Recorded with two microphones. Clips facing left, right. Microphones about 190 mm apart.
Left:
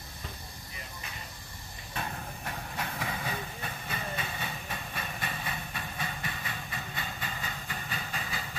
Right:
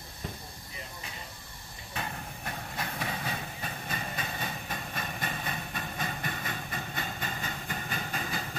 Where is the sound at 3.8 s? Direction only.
40° right (ahead or behind).